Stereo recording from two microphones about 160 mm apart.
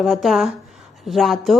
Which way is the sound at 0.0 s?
Centre (ahead or behind).